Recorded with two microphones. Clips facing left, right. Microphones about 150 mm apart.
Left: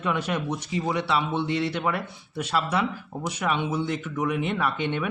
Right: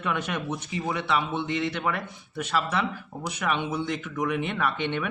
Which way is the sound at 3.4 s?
10° left (ahead or behind).